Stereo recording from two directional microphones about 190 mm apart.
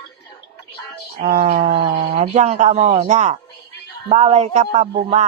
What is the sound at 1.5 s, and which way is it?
Speech, 40° right (ahead or behind).